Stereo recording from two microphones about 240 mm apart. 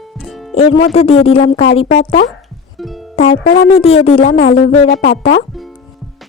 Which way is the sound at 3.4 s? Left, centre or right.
Left.